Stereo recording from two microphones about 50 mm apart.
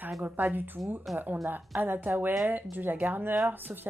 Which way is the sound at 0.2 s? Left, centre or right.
Right.